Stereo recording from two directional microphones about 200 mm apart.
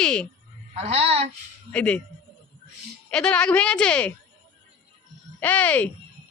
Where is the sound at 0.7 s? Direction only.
30° right (ahead or behind).